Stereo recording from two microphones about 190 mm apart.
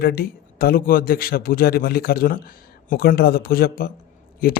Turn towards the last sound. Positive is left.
turn(degrees=50)  # may be behind; listen again after turning